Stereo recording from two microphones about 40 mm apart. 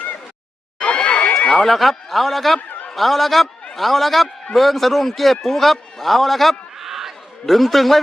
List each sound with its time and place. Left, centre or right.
0.9 s crowd: left
1.5 s a man's voice: centre
2.6 s a sound: left
2.9 s a man's voice: centre
6.7 s a sound: centre
7.4 s a man's voice: centre